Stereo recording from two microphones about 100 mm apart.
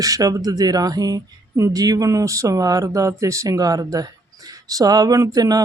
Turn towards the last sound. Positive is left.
turn(degrees=-40)  # may be behind; listen again after turning